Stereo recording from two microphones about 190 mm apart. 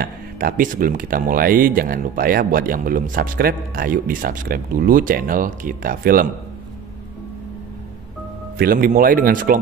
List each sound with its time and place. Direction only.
0.0 s speech: 50° right (ahead or behind)
8.5 s speech: 50° right (ahead or behind)